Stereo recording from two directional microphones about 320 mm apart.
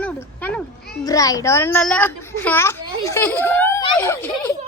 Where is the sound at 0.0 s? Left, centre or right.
Centre.